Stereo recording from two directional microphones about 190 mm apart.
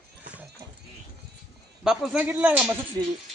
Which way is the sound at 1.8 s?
5° right (ahead or behind).